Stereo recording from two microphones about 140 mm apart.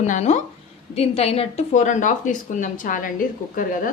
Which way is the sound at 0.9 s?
45° left (ahead or behind).